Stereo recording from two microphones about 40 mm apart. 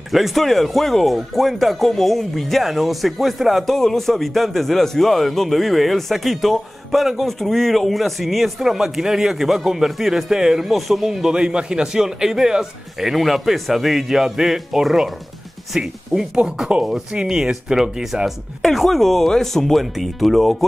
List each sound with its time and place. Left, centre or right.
0.1 s a man's voice: centre
3.7 s a man's voice: centre
18.7 s a man's voice: centre